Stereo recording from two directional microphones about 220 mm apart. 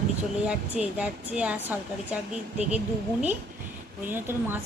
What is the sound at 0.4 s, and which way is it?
A woman's voice, 5° right (ahead or behind).